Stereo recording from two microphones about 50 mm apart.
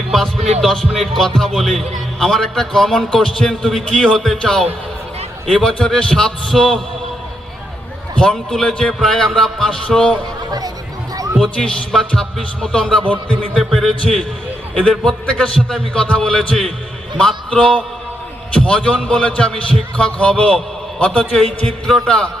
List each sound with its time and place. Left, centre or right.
0.1 s music: centre
1.4 s a man's voice: centre
8.2 s a man's voice: centre
11.3 s a man's voice: centre
14.8 s a man's voice: centre